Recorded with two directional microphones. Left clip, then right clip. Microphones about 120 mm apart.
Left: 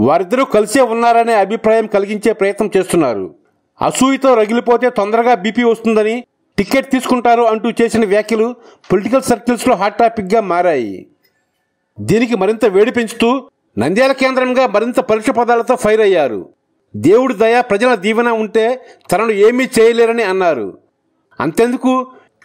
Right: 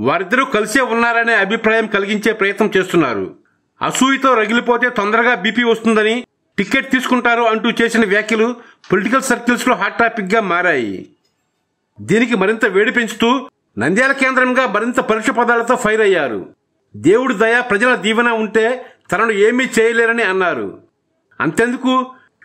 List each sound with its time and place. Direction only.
0.0 s a man's voice: 40° left (ahead or behind)
12.1 s a man's voice: 35° left (ahead or behind)